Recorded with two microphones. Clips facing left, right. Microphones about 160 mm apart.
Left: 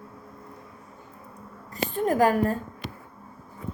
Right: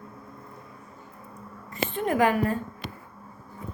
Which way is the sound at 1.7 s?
40° left (ahead or behind).